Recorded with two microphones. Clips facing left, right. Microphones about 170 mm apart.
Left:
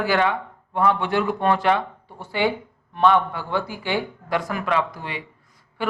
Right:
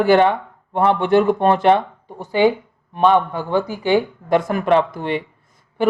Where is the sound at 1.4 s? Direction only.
25° right (ahead or behind).